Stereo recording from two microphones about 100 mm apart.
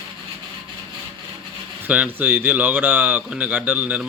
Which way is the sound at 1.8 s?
15° right (ahead or behind).